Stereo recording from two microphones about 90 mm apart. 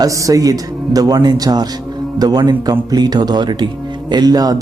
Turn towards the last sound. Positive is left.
turn(degrees=-45)  # may be behind; listen again after turning